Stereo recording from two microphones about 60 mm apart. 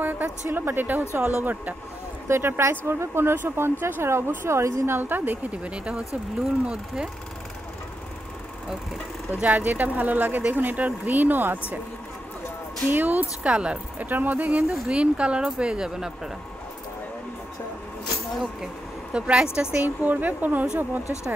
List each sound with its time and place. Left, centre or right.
0.0 s speech: right
2.2 s speech: right
4.8 s speech: right
5.6 s speech: centre
9.3 s speech: right
12.9 s speech: right
14.0 s speech: right
14.7 s speech: centre
19.1 s speech: centre
19.8 s speech: right